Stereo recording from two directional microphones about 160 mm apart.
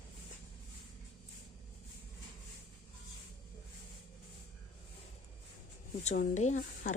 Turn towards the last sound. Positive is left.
turn(degrees=50)  # may be behind; listen again after turning